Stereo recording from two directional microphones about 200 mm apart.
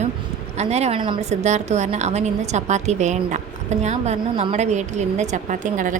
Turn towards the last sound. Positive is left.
turn(degrees=-40)  # may be behind; listen again after turning